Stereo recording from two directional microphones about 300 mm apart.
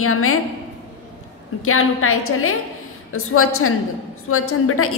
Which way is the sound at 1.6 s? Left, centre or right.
Left.